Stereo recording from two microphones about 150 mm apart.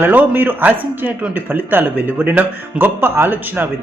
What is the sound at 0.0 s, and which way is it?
A man's voice, 15° right (ahead or behind).